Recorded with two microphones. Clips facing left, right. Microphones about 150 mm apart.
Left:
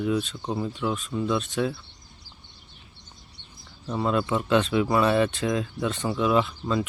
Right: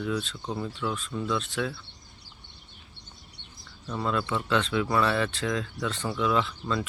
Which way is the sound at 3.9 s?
20° left (ahead or behind).